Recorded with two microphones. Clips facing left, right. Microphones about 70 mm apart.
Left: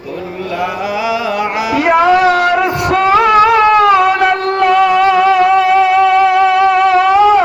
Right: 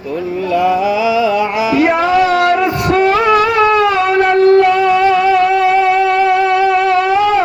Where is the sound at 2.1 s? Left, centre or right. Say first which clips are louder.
Left 2 dB; left.